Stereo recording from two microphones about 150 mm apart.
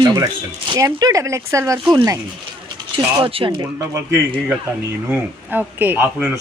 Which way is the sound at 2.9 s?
35° right (ahead or behind).